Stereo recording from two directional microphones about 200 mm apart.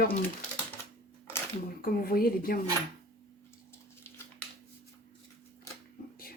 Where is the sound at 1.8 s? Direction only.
50° left (ahead or behind).